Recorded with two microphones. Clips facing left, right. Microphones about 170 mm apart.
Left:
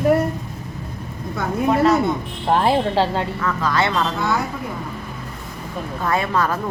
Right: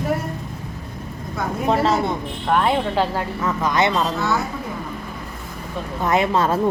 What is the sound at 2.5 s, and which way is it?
Speech, 30° left (ahead or behind).